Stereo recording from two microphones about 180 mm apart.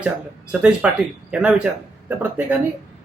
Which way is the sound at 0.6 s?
5° right (ahead or behind).